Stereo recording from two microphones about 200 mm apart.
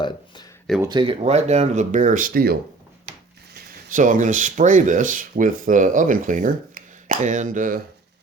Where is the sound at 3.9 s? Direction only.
40° right (ahead or behind).